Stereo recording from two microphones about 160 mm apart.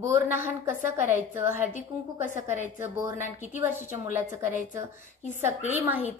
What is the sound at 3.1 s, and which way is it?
Speech, 50° left (ahead or behind).